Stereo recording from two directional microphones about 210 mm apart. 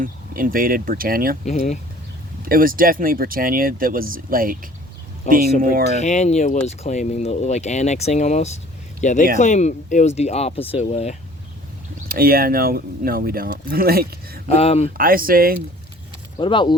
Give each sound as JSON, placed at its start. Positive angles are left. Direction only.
{"t": 0.0, "sound": "speech", "side_deg": -40}
{"t": 1.5, "sound": "speech", "side_deg": 30}
{"t": 2.4, "sound": "speech", "side_deg": -40}
{"t": 6.0, "sound": "speech", "side_deg": 35}
{"t": 12.0, "sound": "speech", "side_deg": -45}
{"t": 14.4, "sound": "speech", "side_deg": 30}
{"t": 14.9, "sound": "speech", "side_deg": -45}
{"t": 16.4, "sound": "speech", "side_deg": 20}